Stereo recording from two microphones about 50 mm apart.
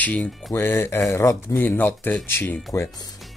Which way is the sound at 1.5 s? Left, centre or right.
Left.